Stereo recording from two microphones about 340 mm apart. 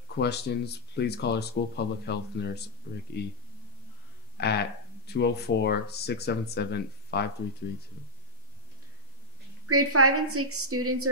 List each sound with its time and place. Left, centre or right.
0.2 s speech: left
4.4 s speech: left
9.7 s a woman's voice: right